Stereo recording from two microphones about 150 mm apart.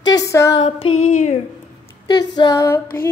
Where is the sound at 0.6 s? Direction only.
40° left (ahead or behind).